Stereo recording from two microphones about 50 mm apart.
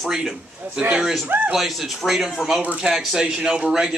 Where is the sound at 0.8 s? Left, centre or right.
Centre.